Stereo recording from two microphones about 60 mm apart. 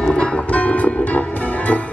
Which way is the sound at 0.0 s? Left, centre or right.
Centre.